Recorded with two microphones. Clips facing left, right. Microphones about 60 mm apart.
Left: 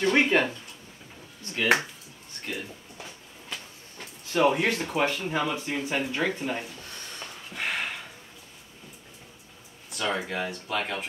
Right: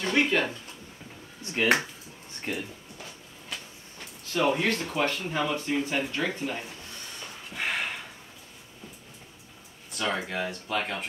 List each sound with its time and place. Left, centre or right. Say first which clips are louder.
0.0 s speech: left 3 dB; left
1.4 s speech: even; right
4.3 s speech: left 2 dB; centre
7.4 s a sound: even; centre
9.8 s speech: left 1 dB; centre